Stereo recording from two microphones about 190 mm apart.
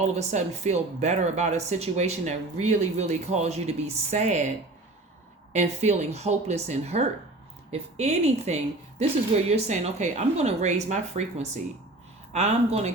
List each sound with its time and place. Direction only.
0.0 s speech: 35° right (ahead or behind)
5.5 s speech: 35° right (ahead or behind)